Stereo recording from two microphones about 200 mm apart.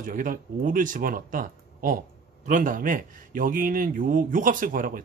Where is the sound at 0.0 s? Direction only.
40° right (ahead or behind).